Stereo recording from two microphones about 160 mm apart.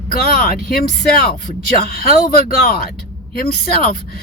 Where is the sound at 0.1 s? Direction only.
70° left (ahead or behind).